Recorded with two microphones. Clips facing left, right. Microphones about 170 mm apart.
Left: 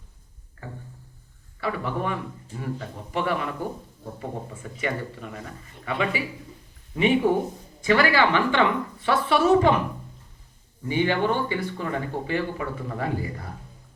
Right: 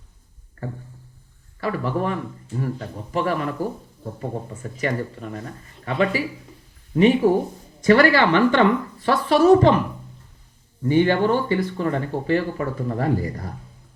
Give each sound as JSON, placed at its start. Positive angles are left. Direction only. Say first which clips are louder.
{"t": 1.6, "sound": "speech", "louder": "right 4 dB", "side_deg": -40}
{"t": 4.8, "sound": "a woman's voice", "louder": "right 4 dB", "side_deg": -40}
{"t": 10.8, "sound": "a woman's voice", "louder": "right 5 dB", "side_deg": -45}